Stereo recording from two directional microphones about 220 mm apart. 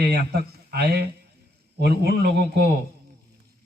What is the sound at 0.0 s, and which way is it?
A man's voice, 45° right (ahead or behind).